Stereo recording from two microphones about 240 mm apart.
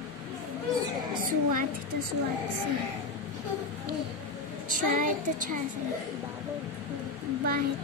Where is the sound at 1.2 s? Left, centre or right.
Right.